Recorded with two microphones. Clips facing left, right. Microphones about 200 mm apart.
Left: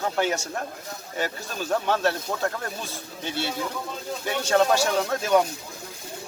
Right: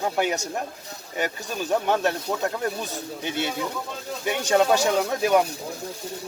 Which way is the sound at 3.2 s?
15° right (ahead or behind).